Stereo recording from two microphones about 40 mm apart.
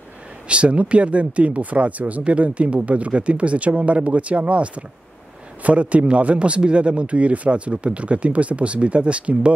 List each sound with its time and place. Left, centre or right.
0.5 s speech: right